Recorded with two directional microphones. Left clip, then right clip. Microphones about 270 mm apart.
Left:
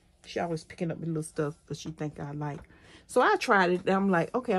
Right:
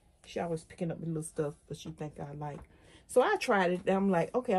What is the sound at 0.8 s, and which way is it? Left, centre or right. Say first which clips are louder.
Speech: left 4 dB; left.